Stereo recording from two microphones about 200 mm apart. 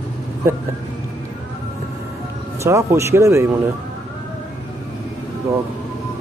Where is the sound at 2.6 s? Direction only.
15° right (ahead or behind).